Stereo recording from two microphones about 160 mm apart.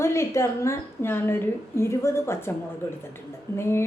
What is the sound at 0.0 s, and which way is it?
A woman's voice, 15° left (ahead or behind).